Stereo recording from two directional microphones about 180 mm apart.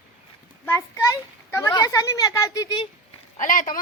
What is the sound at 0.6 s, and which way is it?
A child's voice, 15° left (ahead or behind).